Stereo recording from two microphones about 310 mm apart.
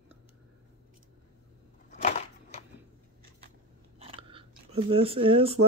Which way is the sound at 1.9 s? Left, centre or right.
Left.